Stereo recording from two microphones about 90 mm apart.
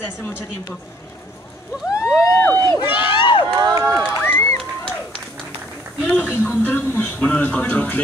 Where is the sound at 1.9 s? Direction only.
30° left (ahead or behind).